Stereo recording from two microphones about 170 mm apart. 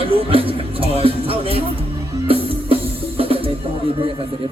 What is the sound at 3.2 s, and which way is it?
Music, 30° right (ahead or behind).